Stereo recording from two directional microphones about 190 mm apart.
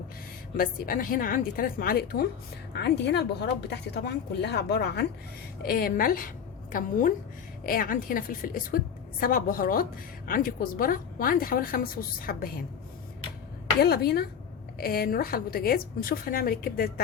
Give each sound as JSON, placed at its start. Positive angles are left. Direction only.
{"t": 0.5, "sound": "a woman's voice", "side_deg": 50}
{"t": 5.6, "sound": "a woman's voice", "side_deg": 50}
{"t": 13.8, "sound": "a woman's voice", "side_deg": 55}